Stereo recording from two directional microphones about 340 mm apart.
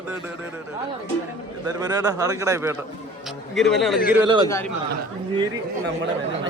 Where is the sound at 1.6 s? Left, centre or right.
Centre.